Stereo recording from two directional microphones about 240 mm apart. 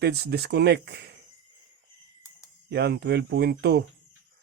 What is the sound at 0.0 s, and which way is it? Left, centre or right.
Speech, right.